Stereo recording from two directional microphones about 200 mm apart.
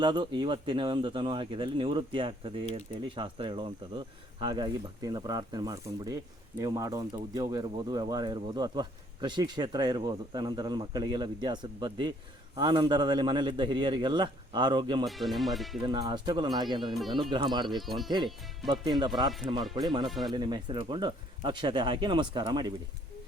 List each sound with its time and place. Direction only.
0.0 s speech: 20° right (ahead or behind)
15.0 s speech: centre (ahead or behind)
15.8 s speech: 25° right (ahead or behind)
17.8 s speech: centre (ahead or behind)
18.7 s speech: 20° right (ahead or behind)
20.1 s speech: centre (ahead or behind)
20.3 s speech: 20° right (ahead or behind)